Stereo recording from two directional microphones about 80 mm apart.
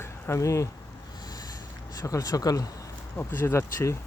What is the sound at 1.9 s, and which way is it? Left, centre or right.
Speech, left.